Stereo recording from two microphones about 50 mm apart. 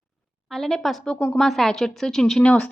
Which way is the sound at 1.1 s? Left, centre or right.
Left.